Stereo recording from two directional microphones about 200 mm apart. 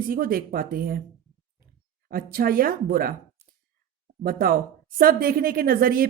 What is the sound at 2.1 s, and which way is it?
Speech, 45° right (ahead or behind).